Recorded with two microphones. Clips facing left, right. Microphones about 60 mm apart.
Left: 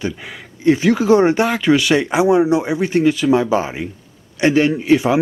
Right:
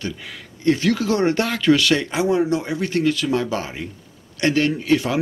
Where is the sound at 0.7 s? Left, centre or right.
Centre.